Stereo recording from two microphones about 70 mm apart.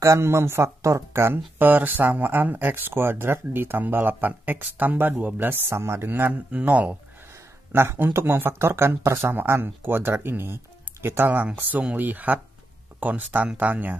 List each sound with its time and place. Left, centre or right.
0.0 s speech: right
5.7 s speech: right
7.7 s speech: right